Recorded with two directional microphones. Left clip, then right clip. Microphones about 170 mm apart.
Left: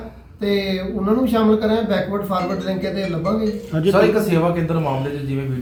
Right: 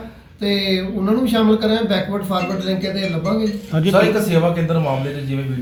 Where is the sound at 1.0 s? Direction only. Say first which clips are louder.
Even; 10° left (ahead or behind).